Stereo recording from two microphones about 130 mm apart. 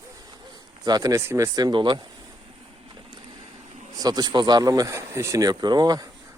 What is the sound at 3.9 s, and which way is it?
Speech, 30° right (ahead or behind).